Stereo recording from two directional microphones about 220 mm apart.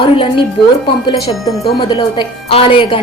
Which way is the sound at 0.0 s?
20° left (ahead or behind).